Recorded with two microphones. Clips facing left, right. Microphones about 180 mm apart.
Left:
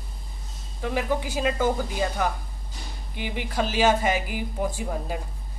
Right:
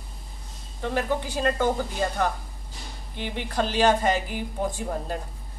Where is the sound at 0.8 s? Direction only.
10° left (ahead or behind).